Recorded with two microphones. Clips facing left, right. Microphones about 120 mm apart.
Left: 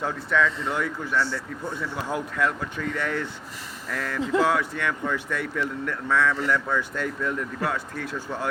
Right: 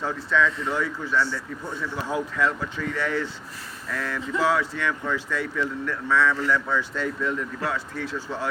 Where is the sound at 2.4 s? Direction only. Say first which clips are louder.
Right 1 dB; 55° left (ahead or behind).